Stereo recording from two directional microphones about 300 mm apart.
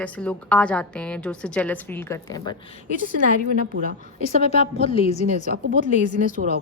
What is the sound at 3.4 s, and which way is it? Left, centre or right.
Speech, right.